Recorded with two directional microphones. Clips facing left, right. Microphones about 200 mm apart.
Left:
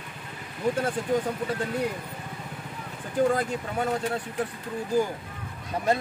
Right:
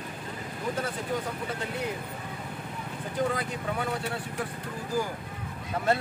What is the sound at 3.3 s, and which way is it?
Speech, 45° left (ahead or behind).